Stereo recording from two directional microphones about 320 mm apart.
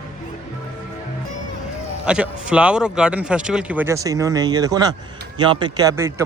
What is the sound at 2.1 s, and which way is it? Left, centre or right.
Speech, centre.